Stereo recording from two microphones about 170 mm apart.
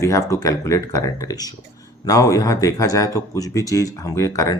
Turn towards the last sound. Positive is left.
turn(degrees=20)  # may be behind; listen again after turning